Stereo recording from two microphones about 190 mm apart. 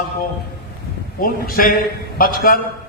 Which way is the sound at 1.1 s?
50° left (ahead or behind).